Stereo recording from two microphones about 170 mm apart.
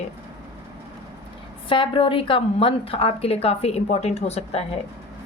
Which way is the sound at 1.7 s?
30° left (ahead or behind).